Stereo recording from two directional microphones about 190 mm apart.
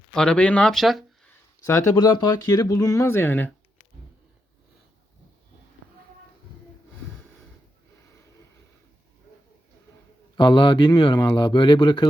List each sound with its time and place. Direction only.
0.1 s speech: 5° left (ahead or behind)
1.6 s speech: 15° left (ahead or behind)
10.3 s speech: 25° left (ahead or behind)